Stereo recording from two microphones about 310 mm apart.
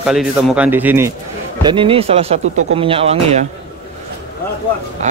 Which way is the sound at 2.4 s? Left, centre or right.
Right.